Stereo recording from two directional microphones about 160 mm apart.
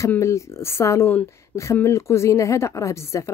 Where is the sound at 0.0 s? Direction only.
15° left (ahead or behind).